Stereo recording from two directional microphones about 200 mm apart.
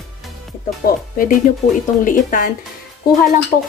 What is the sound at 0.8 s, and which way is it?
Speech, 45° left (ahead or behind).